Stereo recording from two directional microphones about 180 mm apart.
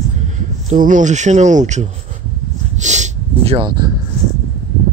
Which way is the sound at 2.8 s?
40° right (ahead or behind).